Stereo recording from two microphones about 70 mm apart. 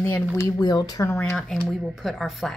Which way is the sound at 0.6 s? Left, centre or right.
Left.